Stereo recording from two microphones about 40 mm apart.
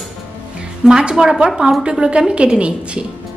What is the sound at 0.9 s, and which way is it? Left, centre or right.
A woman's voice, centre.